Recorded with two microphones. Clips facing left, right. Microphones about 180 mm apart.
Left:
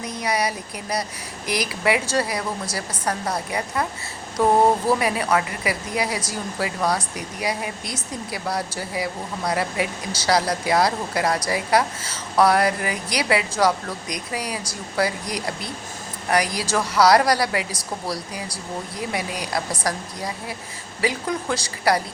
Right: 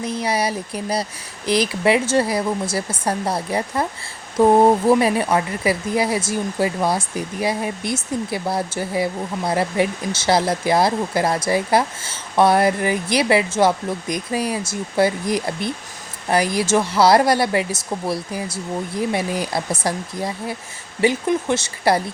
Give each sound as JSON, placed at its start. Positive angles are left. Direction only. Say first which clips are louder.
{"t": 0.0, "sound": "speech", "louder": "right 3 dB", "side_deg": -30}